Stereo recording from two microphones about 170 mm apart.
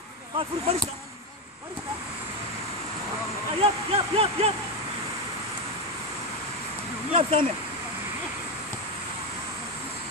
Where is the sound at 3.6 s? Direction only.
35° right (ahead or behind).